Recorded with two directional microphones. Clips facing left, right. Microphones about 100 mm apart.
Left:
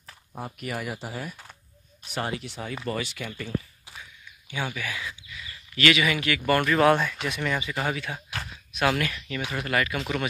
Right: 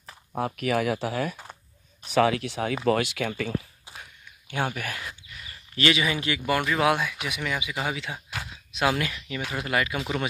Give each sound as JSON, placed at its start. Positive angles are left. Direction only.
{"t": 0.6, "sound": "speech", "side_deg": -90}
{"t": 4.0, "sound": "a sound", "side_deg": -60}
{"t": 5.8, "sound": "speech", "side_deg": -30}
{"t": 6.4, "sound": "speech", "side_deg": -10}